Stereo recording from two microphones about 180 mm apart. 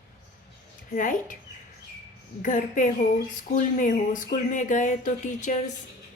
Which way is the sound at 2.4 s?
45° left (ahead or behind).